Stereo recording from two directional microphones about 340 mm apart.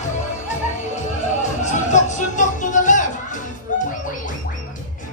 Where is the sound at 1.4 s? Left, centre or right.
Left.